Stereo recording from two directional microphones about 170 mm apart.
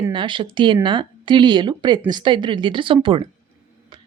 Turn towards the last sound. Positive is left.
turn(degrees=-30)  # may be behind; listen again after turning